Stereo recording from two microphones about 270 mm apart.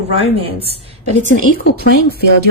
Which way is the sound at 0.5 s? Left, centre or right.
Left.